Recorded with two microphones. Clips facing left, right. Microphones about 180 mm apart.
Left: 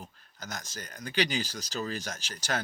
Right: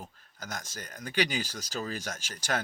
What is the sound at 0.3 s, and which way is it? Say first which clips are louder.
Speech: right 1 dB; 45° right (ahead or behind).